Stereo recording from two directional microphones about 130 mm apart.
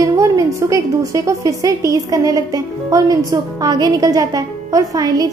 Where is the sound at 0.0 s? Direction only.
25° right (ahead or behind).